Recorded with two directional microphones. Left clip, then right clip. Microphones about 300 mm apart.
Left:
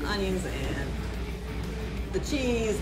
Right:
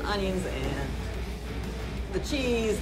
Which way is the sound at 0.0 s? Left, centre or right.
Centre.